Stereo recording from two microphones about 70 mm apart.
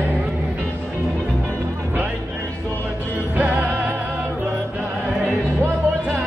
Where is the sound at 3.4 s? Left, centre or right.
Right.